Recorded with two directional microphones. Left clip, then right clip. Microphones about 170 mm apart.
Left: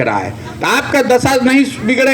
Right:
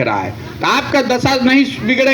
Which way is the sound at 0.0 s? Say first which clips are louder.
Left 1 dB; 45° left (ahead or behind).